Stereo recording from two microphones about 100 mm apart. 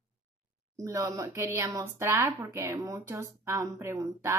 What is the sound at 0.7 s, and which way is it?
Speech, 35° right (ahead or behind).